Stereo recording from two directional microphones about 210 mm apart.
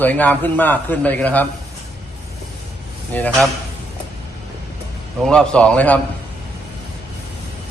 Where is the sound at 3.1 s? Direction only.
10° left (ahead or behind).